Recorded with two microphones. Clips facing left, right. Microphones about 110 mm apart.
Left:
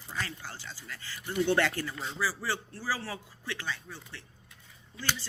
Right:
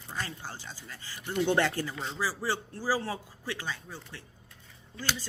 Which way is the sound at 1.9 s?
Centre (ahead or behind).